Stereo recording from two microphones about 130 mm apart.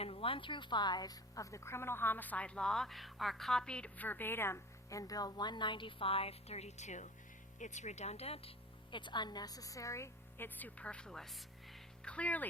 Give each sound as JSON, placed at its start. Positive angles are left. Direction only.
{"t": 0.0, "sound": "a woman's voice", "side_deg": 45}